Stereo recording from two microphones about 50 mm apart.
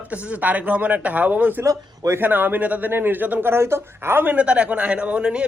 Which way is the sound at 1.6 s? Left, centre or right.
Right.